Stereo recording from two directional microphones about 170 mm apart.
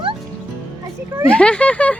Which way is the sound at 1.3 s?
5° left (ahead or behind).